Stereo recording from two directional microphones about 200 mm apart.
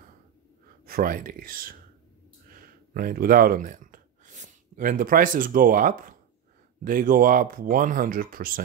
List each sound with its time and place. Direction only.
0.8 s speech: 45° right (ahead or behind)